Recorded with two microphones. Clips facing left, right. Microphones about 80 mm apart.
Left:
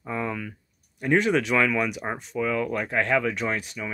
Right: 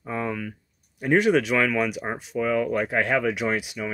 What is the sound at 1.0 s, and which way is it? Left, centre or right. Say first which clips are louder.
Speech: right 2 dB; centre.